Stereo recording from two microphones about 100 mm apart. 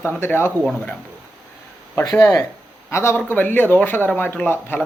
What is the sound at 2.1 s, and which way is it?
Speech, 35° left (ahead or behind).